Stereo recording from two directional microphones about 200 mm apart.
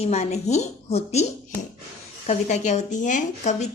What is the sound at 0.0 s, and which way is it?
Speech, 35° left (ahead or behind).